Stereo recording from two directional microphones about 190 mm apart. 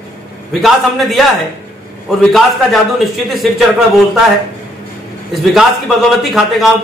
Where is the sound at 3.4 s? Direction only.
Centre (ahead or behind).